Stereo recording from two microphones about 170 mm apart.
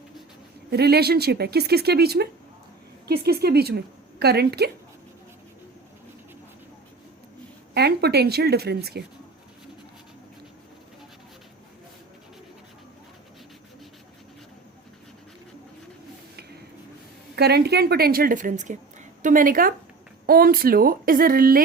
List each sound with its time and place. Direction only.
0.7 s speech: 70° right (ahead or behind)
3.4 s speech: 70° right (ahead or behind)
7.7 s speech: 70° right (ahead or behind)
17.3 s a woman's voice: 70° right (ahead or behind)